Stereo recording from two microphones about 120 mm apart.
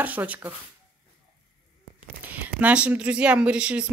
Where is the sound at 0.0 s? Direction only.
15° right (ahead or behind).